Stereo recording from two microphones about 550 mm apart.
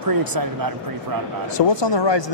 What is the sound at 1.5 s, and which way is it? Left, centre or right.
Speech, left.